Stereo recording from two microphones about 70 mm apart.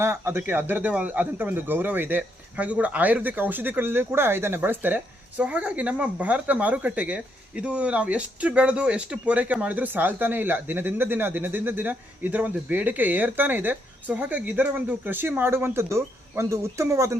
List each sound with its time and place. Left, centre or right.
0.0 s speech: right
5.4 s speech: centre; by 17.2 s right